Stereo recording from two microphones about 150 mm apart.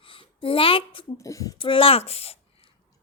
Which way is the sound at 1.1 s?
20° left (ahead or behind).